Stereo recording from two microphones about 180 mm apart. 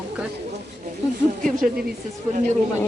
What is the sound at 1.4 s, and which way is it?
Speech, 50° right (ahead or behind).